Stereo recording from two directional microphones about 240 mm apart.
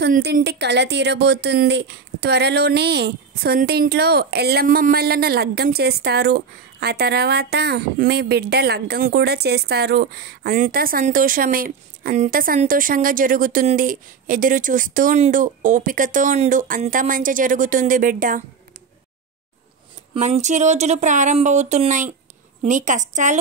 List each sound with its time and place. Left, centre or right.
0.0 s speech: right
20.2 s speech: right